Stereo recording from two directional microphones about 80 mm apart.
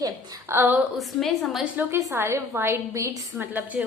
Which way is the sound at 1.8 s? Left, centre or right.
Right.